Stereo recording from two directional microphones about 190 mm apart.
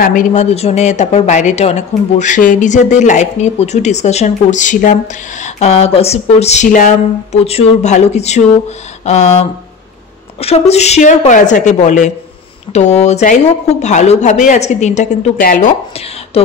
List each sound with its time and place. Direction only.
0.0 s speech: 45° left (ahead or behind)
10.7 s speech: 35° left (ahead or behind)